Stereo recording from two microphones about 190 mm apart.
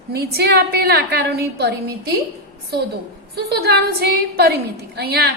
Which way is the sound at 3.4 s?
55° right (ahead or behind).